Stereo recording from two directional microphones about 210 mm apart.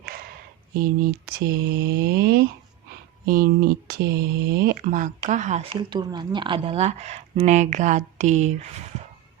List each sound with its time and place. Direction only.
0.8 s speech: 45° right (ahead or behind)
5.9 s speech: 20° right (ahead or behind)